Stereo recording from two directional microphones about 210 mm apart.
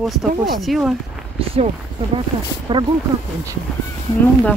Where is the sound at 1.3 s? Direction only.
25° right (ahead or behind).